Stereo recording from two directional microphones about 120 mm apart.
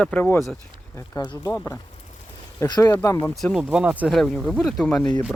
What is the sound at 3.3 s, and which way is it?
Speech, centre (ahead or behind).